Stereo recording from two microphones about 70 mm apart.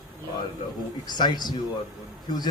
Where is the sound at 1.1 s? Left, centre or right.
Left.